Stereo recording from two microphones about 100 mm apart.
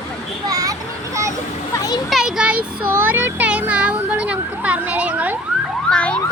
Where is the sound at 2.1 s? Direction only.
5° right (ahead or behind).